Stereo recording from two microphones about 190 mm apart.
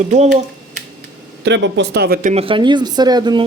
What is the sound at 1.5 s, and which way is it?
Speech, 70° right (ahead or behind).